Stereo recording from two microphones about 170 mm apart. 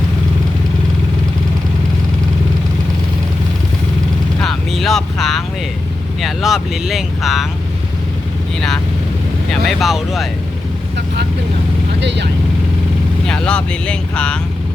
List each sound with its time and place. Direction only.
4.4 s vehicle: centre (ahead or behind)
6.2 s speech: centre (ahead or behind)
9.5 s speech: centre (ahead or behind)
11.9 s speech: 90° right
13.2 s speech: 5° left (ahead or behind)